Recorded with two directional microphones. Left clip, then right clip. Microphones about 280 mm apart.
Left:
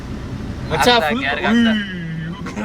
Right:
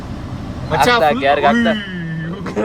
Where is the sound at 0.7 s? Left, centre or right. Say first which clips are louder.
Right 2 dB; centre.